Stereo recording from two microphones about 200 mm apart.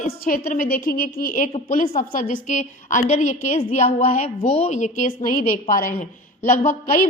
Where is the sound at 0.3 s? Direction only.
45° left (ahead or behind).